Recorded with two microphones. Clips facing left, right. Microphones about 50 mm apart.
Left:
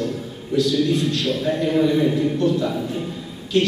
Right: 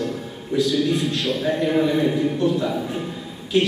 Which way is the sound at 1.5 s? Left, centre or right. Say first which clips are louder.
Left 1 dB; centre.